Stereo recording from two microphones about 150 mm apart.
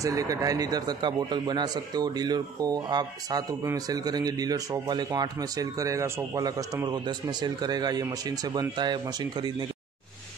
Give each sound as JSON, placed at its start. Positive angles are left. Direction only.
{"t": 0.0, "sound": "a man's voice", "side_deg": -25}